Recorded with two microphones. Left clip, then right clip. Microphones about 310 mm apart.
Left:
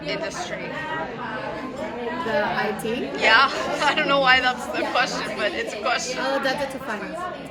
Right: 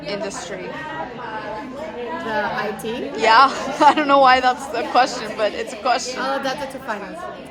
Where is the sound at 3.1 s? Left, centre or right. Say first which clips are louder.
Right 4 dB; centre.